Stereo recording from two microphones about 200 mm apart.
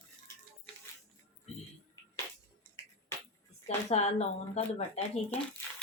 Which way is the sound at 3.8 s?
30° left (ahead or behind).